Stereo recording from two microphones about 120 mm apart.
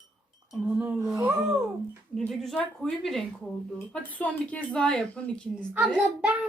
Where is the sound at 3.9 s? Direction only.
15° left (ahead or behind).